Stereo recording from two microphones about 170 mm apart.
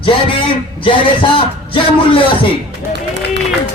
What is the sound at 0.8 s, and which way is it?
Speech, 30° left (ahead or behind).